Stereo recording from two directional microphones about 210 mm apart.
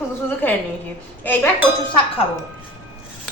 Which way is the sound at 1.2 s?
10° left (ahead or behind).